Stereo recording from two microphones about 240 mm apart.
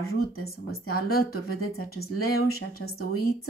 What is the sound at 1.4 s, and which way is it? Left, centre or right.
Speech, left.